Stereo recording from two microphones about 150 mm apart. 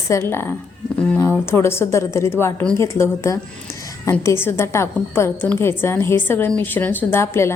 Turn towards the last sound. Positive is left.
turn(degrees=15)  # may be behind; listen again after turning